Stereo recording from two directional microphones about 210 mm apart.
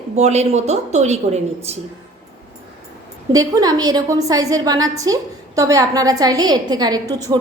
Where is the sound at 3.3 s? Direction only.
15° right (ahead or behind).